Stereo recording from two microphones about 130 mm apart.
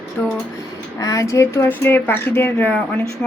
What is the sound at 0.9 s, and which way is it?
Speech, 25° left (ahead or behind).